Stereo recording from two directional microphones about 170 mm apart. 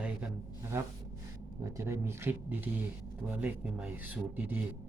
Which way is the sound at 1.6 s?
15° right (ahead or behind).